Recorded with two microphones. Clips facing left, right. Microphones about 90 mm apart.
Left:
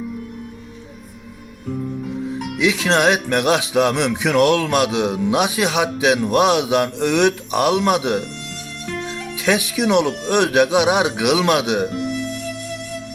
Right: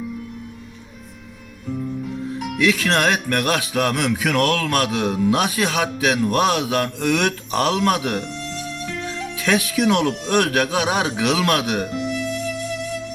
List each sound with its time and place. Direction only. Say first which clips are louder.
2.6 s speech: left 1 dB; 20° left (ahead or behind)
9.4 s speech: even; 15° left (ahead or behind)